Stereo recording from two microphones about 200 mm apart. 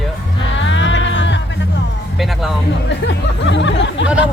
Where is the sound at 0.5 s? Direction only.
65° left (ahead or behind).